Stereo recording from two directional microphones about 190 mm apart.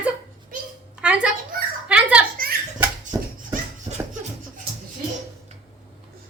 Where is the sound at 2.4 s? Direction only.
50° right (ahead or behind).